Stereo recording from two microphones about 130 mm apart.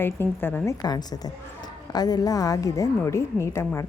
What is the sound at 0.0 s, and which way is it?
A woman's voice, 15° left (ahead or behind).